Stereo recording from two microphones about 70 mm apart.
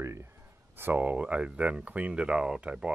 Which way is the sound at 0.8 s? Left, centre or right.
Right.